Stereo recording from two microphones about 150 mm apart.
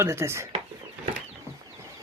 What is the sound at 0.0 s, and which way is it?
Speech, 15° right (ahead or behind).